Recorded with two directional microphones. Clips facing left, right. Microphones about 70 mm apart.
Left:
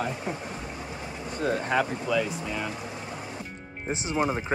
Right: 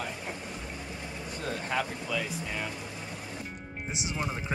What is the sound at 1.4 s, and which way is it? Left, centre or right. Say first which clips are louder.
Speech: left 9 dB; centre.